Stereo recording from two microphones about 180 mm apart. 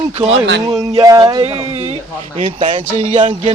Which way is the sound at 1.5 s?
35° right (ahead or behind).